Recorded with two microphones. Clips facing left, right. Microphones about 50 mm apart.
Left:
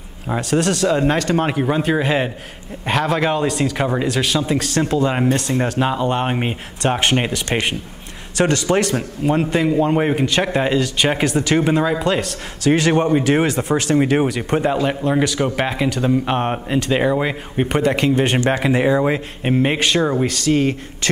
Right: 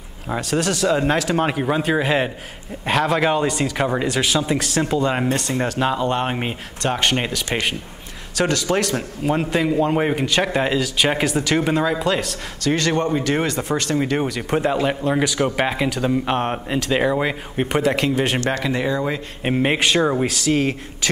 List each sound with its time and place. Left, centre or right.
0.3 s a man's voice: centre
18.4 s speech: centre
19.4 s a man's voice: centre